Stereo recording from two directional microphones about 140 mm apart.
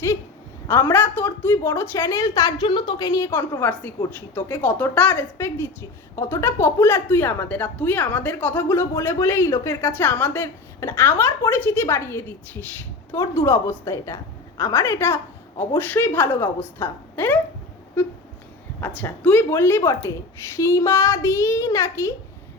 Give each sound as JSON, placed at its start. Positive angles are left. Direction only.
{"t": 0.7, "sound": "a woman's voice", "side_deg": 20}
{"t": 3.1, "sound": "a woman's voice", "side_deg": 20}
{"t": 18.8, "sound": "a woman's voice", "side_deg": 10}